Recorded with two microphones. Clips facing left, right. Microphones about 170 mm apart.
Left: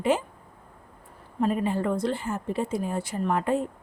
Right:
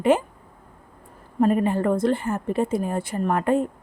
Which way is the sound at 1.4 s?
55° right (ahead or behind).